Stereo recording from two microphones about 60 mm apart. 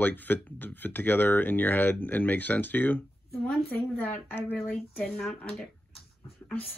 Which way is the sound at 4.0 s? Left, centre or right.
Left.